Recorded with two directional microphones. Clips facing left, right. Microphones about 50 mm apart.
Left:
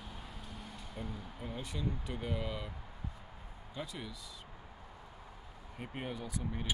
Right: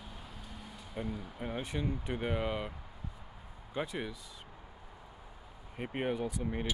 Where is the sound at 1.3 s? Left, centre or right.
Right.